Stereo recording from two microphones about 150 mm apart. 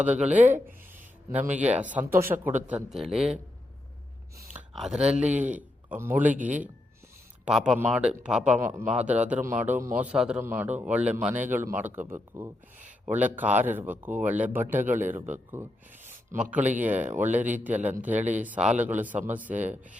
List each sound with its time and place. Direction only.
0.0 s a man's voice: 10° right (ahead or behind)
0.4 s a sound: 10° right (ahead or behind)
1.6 s a man's voice: 10° right (ahead or behind)
4.5 s a man's voice: centre (ahead or behind)
14.8 s speech: 55° right (ahead or behind)
15.1 s a man's voice: 15° right (ahead or behind)
16.0 s a sound: 10° right (ahead or behind)
16.8 s a man's voice: 10° right (ahead or behind)